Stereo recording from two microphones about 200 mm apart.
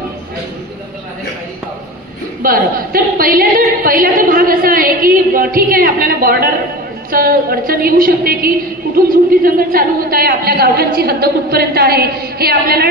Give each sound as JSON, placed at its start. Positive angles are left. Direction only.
{"t": 2.4, "sound": "a woman's voice", "side_deg": -45}